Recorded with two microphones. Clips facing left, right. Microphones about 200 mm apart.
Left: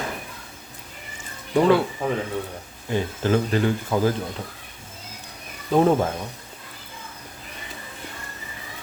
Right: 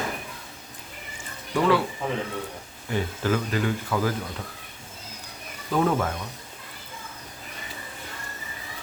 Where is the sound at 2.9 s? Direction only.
25° left (ahead or behind).